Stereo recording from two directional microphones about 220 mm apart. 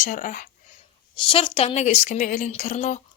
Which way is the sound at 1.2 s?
25° left (ahead or behind).